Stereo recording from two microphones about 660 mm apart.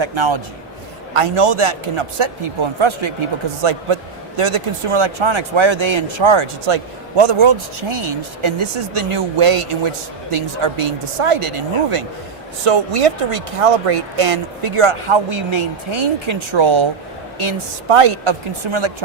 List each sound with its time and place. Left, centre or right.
0.0 s speech: right